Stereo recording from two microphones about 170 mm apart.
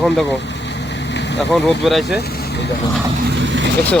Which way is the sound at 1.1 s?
90° left.